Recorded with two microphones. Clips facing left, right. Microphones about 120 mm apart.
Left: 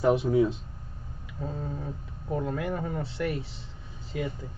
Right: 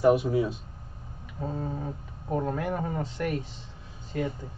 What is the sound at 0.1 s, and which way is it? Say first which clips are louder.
Speech: left 1 dB; 25° left (ahead or behind).